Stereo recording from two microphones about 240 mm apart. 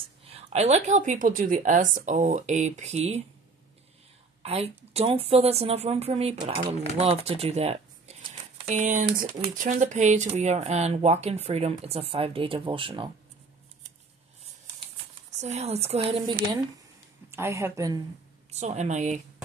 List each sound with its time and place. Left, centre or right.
0.3 s a woman's voice: right
4.4 s a woman's voice: right
15.4 s speech: right
17.3 s speech: centre
18.5 s speech: right